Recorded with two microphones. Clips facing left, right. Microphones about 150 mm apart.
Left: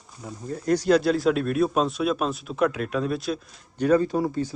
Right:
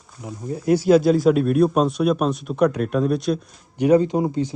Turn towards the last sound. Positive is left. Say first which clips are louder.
# right 3 dB
turn(degrees=-20)  # may be behind; listen again after turning